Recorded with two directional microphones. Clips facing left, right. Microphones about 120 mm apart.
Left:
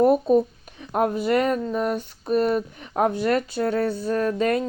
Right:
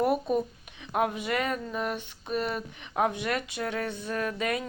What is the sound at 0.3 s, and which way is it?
Speech, 35° left (ahead or behind).